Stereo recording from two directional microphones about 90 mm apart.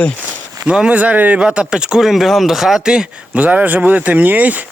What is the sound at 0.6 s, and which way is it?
Speech, 10° right (ahead or behind).